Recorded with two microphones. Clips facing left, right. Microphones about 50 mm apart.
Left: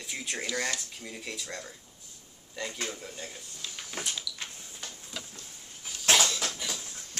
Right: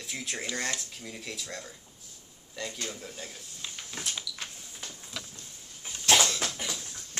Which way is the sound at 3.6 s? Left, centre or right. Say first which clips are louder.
Even; right.